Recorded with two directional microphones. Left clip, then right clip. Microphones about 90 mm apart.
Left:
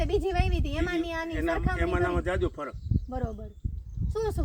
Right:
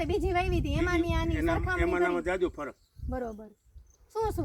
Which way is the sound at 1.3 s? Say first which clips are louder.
Even; centre (ahead or behind).